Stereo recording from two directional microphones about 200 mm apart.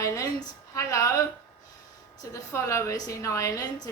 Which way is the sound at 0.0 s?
15° left (ahead or behind).